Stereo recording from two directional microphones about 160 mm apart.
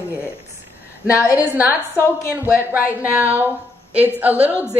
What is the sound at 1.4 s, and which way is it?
A woman's voice, 10° right (ahead or behind).